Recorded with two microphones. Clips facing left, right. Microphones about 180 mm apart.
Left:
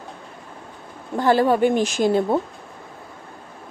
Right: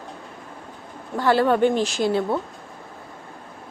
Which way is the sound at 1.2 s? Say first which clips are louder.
Left 1 dB; 15° left (ahead or behind).